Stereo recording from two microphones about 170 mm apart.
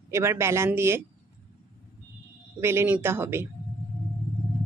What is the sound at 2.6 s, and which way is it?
Speech, 15° right (ahead or behind).